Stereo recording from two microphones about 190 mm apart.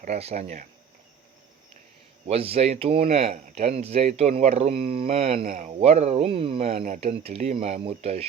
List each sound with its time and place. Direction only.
0.0 s speech: 35° right (ahead or behind)
2.2 s speech: 30° right (ahead or behind)